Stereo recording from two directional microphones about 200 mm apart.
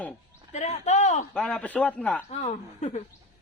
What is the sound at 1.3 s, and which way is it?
Speech, 5° left (ahead or behind).